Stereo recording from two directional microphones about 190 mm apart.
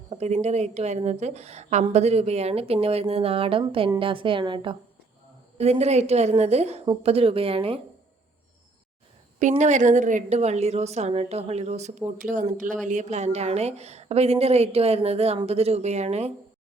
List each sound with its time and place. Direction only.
0.1 s a woman's voice: 35° right (ahead or behind)
9.4 s a woman's voice: 40° right (ahead or behind)